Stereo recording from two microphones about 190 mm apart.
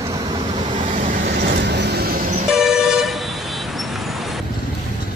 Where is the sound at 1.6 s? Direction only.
65° right (ahead or behind).